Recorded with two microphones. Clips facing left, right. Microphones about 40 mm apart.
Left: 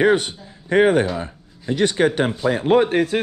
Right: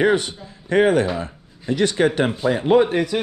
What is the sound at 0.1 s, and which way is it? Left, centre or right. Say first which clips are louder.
A man's voice: left 1 dB; left.